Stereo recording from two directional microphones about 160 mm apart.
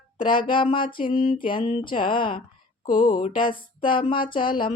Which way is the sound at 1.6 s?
55° left (ahead or behind).